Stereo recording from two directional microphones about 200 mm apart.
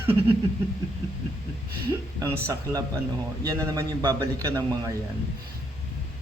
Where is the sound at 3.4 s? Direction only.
15° right (ahead or behind).